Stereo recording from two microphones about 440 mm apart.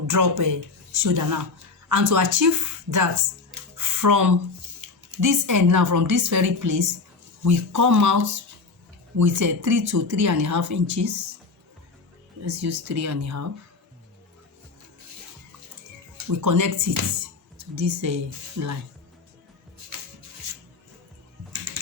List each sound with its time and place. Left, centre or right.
0.1 s speech: right
12.5 s speech: right
16.4 s speech: right